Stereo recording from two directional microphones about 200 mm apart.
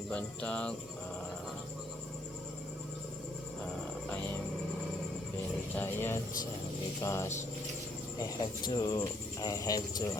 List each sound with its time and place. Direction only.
0.1 s speech: 5° left (ahead or behind)
5.7 s speech: 10° left (ahead or behind)